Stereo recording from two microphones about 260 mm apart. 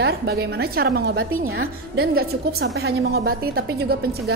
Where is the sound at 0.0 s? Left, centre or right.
Right.